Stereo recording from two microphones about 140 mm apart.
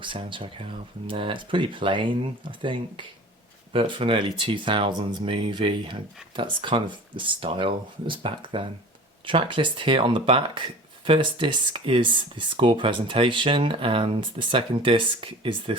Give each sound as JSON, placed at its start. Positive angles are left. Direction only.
{"t": 0.0, "sound": "speech", "side_deg": -35}